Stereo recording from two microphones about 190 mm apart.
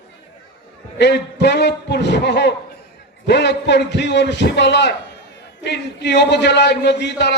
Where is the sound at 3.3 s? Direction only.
65° left (ahead or behind).